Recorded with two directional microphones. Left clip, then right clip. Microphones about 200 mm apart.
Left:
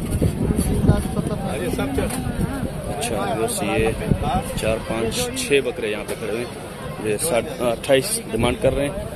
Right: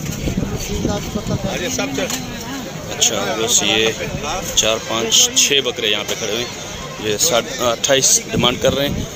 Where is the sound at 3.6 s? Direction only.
5° left (ahead or behind).